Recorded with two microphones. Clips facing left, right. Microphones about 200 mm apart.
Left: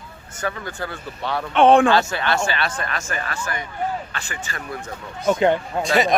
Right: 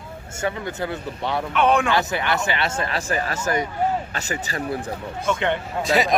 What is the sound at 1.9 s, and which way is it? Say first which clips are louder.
Speech: left 2 dB; 20° right (ahead or behind).